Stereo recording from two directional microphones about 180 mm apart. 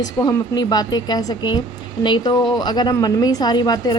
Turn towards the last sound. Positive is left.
turn(degrees=25)  # may be behind; listen again after turning